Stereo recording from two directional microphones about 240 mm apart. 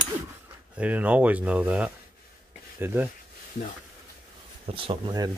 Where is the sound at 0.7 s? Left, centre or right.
Centre.